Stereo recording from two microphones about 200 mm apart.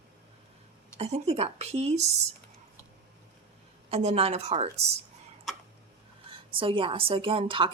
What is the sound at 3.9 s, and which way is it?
Speech, 30° right (ahead or behind).